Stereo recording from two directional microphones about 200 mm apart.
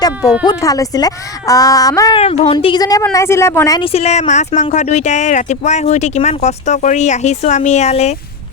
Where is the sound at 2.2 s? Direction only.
30° left (ahead or behind).